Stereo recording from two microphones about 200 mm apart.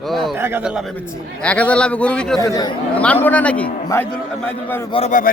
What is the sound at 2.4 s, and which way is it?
Speech, 15° left (ahead or behind).